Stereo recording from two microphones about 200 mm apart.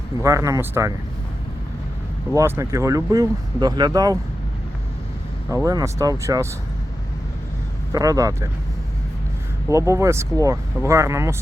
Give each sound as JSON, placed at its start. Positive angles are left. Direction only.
{"t": 0.2, "sound": "speech", "side_deg": -15}
{"t": 2.3, "sound": "speech", "side_deg": -15}
{"t": 5.5, "sound": "speech", "side_deg": -15}
{"t": 7.9, "sound": "speech", "side_deg": -15}
{"t": 9.6, "sound": "speech", "side_deg": -15}